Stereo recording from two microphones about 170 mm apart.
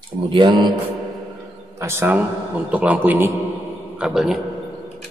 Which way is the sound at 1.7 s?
15° right (ahead or behind).